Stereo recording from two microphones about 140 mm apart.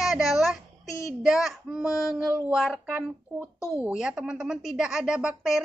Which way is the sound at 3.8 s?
5° right (ahead or behind).